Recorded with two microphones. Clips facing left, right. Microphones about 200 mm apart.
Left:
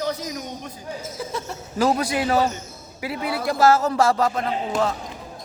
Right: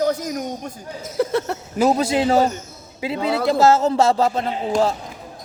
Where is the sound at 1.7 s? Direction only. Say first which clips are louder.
Right 3 dB; 20° right (ahead or behind).